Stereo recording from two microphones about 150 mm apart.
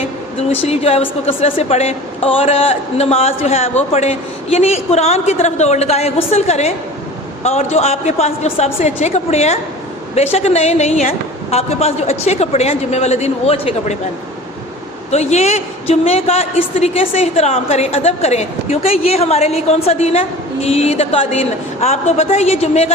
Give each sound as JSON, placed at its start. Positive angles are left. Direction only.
{"t": 0.5, "sound": "a woman's voice", "side_deg": 40}
{"t": 15.1, "sound": "a woman's voice", "side_deg": 50}